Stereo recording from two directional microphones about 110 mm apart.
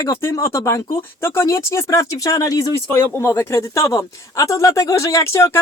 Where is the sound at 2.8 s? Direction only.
20° left (ahead or behind).